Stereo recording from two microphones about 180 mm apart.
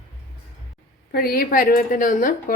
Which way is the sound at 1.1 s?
55° left (ahead or behind).